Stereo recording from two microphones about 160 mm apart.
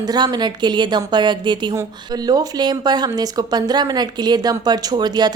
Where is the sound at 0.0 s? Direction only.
25° right (ahead or behind).